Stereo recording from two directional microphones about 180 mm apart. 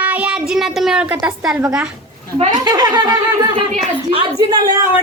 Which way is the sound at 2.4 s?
25° right (ahead or behind).